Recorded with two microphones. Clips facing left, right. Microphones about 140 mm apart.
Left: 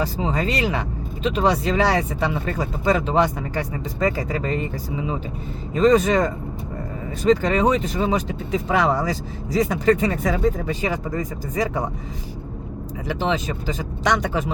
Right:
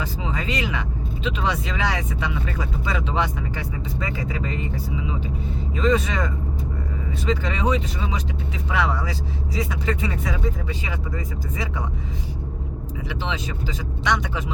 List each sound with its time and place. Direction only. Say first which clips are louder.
0.0 s speech: left 5 dB; 40° left (ahead or behind)
13.1 s speech: left 7 dB; 45° left (ahead or behind)